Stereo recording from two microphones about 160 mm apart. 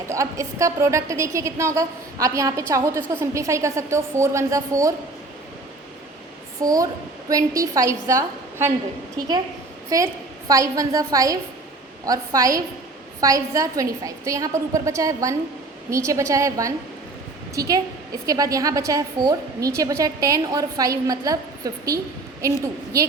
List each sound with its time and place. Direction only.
0.1 s a woman's voice: 20° right (ahead or behind)
6.6 s a woman's voice: 20° right (ahead or behind)
10.5 s a woman's voice: 20° right (ahead or behind)